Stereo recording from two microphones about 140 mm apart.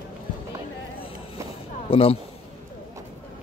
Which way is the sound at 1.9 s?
45° left (ahead or behind).